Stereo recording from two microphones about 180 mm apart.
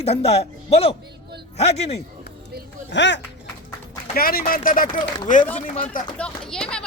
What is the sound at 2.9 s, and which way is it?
Speech, 80° left.